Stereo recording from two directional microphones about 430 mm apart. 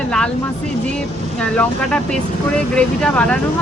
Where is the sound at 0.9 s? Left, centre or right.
Centre.